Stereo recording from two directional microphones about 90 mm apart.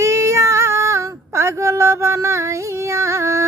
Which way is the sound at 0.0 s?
30° right (ahead or behind).